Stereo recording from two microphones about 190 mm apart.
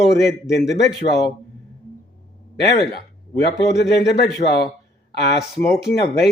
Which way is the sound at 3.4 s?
60° left (ahead or behind).